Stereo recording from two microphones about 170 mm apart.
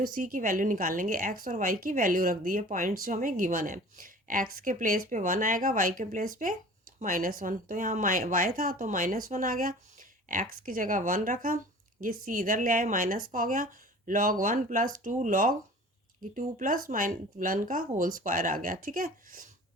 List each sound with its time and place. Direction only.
0.0 s speech: 55° right (ahead or behind)